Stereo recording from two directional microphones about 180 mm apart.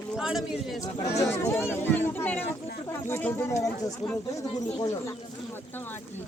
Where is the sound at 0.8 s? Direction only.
15° left (ahead or behind).